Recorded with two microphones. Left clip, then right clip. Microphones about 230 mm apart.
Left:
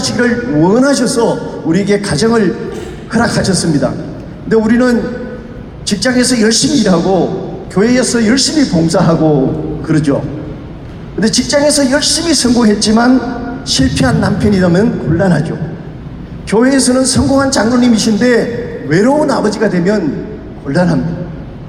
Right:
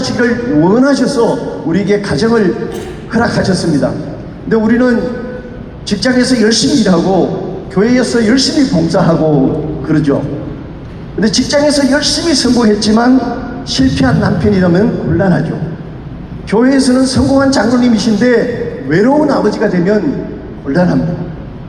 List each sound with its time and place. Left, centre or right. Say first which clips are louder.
0.0 s a man's voice: even; left
11.2 s a man's voice: even; left
16.5 s a man's voice: even; left